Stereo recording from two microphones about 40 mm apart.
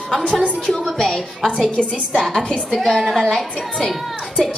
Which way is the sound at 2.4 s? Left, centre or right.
Centre.